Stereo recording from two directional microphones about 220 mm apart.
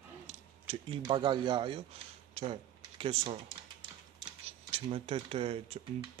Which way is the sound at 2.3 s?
25° right (ahead or behind).